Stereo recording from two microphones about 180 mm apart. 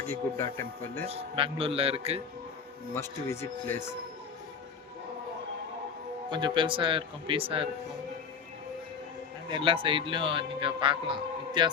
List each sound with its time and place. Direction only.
0.0 s speech: 15° left (ahead or behind)
1.0 s a man's voice: 35° right (ahead or behind)
2.9 s speech: 15° left (ahead or behind)
6.3 s speech: 25° right (ahead or behind)
9.5 s speech: 30° right (ahead or behind)